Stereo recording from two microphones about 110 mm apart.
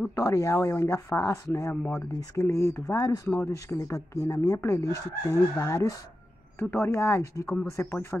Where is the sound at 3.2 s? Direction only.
20° left (ahead or behind).